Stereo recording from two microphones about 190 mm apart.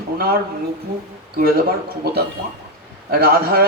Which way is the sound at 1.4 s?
50° right (ahead or behind).